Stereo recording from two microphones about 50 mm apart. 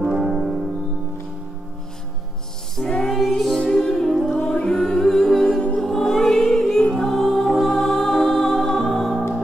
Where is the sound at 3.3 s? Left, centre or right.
Centre.